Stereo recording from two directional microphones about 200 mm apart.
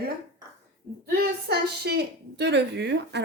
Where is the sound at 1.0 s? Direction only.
55° right (ahead or behind).